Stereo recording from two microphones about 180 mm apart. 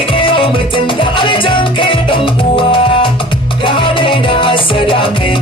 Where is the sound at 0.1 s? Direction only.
30° left (ahead or behind).